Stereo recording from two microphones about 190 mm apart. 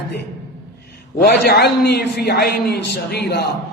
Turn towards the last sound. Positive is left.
turn(degrees=60)  # may be behind; listen again after turning